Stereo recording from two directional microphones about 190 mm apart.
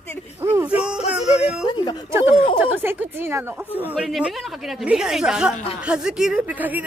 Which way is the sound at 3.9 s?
Centre (ahead or behind).